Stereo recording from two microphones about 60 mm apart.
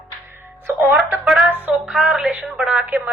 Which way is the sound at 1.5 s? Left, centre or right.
Right.